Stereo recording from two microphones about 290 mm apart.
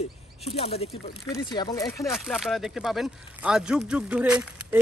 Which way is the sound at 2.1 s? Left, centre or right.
Centre.